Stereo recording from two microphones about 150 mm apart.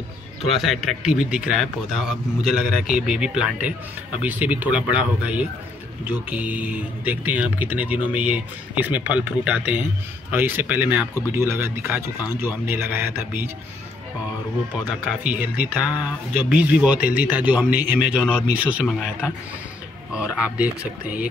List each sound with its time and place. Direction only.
0.4 s a man's voice: centre (ahead or behind)
15.0 s a man's voice: 10° right (ahead or behind)